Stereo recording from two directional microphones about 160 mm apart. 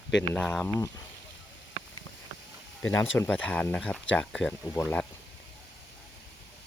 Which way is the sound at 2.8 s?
15° left (ahead or behind).